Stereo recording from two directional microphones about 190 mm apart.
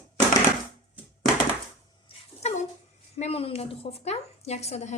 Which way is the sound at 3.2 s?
30° left (ahead or behind).